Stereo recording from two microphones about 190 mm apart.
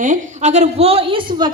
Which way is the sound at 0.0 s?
40° right (ahead or behind).